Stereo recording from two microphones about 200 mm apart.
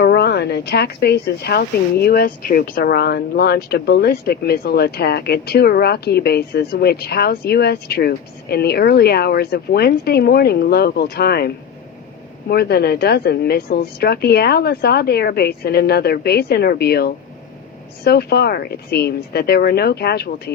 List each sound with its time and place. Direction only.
0.0 s speech: 55° left (ahead or behind)